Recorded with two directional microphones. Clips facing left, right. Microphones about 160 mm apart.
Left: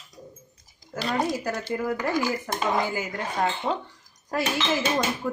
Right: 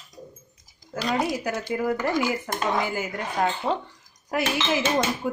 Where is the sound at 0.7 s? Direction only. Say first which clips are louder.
Right 1 dB; centre (ahead or behind).